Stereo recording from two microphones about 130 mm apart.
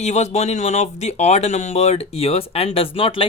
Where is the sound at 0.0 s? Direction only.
60° left (ahead or behind).